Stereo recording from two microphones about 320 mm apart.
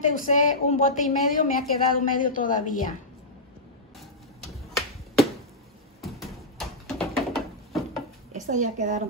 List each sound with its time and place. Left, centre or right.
0.1 s a woman's voice: left
4.5 s finger snapping: centre
5.9 s a sound: centre
8.3 s a woman's voice: right